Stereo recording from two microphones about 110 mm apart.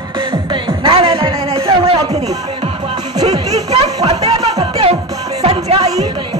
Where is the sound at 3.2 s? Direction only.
80° right.